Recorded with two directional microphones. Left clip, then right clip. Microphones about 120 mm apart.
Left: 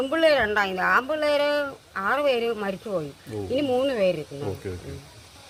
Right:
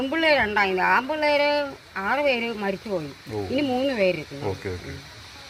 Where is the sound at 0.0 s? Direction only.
25° left (ahead or behind).